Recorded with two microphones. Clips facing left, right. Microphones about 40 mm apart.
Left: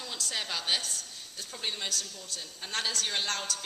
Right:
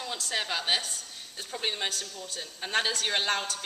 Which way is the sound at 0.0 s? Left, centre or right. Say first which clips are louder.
Right 4 dB; centre.